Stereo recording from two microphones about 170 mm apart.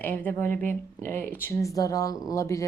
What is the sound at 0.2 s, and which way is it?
Speech, 10° left (ahead or behind).